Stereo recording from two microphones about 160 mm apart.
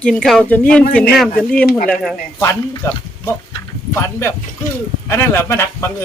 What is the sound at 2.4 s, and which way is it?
Speech, 20° left (ahead or behind).